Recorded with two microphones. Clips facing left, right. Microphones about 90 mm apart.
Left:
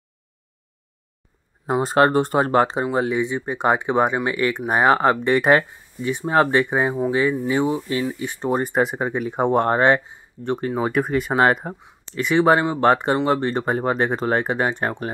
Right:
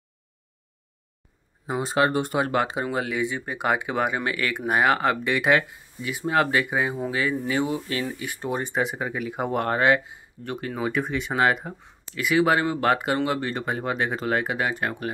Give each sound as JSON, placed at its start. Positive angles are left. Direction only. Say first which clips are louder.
{"t": 1.7, "sound": "speech", "louder": "left 6 dB", "side_deg": 40}
{"t": 8.5, "sound": "speech", "louder": "left 6 dB", "side_deg": 45}
{"t": 10.9, "sound": "speech", "louder": "left 4 dB", "side_deg": 50}